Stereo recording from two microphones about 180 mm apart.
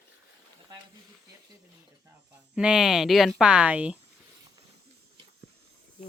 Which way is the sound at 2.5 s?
5° right (ahead or behind).